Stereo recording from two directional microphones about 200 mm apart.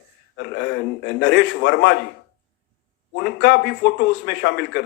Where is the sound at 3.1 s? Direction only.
60° left (ahead or behind).